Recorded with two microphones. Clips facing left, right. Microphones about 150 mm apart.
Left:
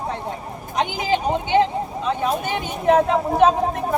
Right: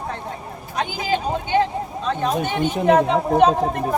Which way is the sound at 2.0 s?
5° left (ahead or behind).